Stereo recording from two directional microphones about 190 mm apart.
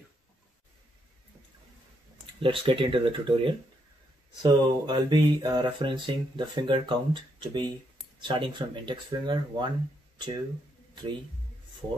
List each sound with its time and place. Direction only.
2.4 s speech: 25° right (ahead or behind)